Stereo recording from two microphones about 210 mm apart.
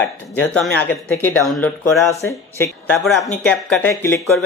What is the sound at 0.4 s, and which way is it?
Speech, 10° left (ahead or behind).